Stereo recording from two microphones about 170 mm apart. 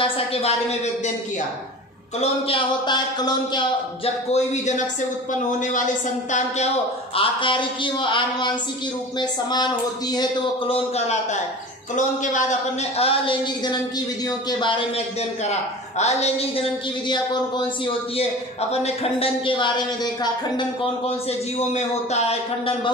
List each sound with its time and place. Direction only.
0.0 s a woman's voice: 35° left (ahead or behind)
2.1 s a man's voice: 35° left (ahead or behind)
4.3 s a woman's voice: 45° left (ahead or behind)
7.2 s a man's voice: 30° left (ahead or behind)
11.9 s a man's voice: 45° left (ahead or behind); by 14.0 s 30° left (ahead or behind)
16.0 s a man's voice: 40° left (ahead or behind)